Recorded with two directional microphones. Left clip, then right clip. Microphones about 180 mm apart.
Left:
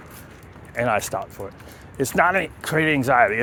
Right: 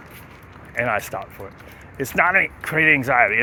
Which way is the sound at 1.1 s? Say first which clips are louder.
Left 2 dB; 25° left (ahead or behind).